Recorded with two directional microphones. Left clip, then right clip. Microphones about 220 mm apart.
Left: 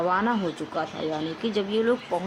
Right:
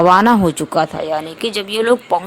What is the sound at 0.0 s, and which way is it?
Speech, 50° right (ahead or behind).